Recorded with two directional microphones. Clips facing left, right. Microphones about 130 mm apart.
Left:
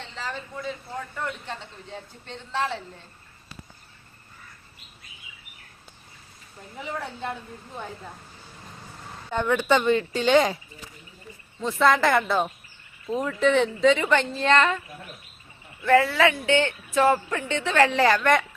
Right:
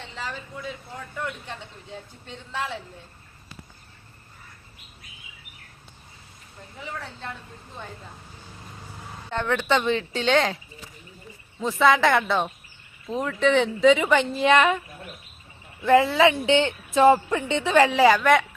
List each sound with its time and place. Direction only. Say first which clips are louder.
2.2 s speech: left 4 dB; 5° right (ahead or behind)
9.3 s speech: left 2 dB; 5° left (ahead or behind)
11.6 s speech: right 1 dB; centre (ahead or behind)
15.8 s speech: right 2 dB; 15° right (ahead or behind)